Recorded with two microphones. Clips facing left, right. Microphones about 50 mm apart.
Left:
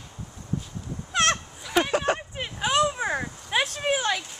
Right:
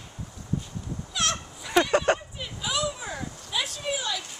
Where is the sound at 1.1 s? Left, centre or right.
Left.